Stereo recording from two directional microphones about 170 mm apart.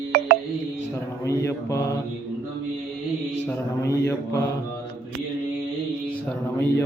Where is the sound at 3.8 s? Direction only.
20° left (ahead or behind).